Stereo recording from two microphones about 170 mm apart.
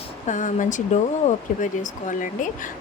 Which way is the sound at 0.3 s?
45° left (ahead or behind).